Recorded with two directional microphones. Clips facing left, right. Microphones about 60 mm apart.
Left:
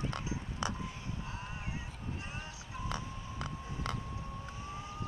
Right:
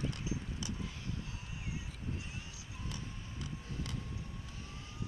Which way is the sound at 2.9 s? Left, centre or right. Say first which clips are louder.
Left 5 dB; left.